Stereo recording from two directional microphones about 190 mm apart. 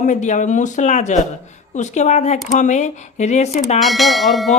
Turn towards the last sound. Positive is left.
turn(degrees=0)  # may be behind; listen again after turning